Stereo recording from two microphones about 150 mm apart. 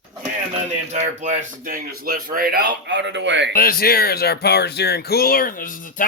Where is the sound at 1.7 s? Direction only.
80° right.